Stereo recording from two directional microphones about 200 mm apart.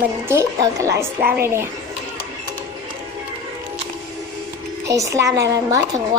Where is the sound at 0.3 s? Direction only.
15° right (ahead or behind).